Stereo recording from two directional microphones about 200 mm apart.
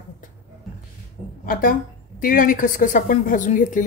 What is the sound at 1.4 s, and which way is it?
A woman's voice, 45° left (ahead or behind).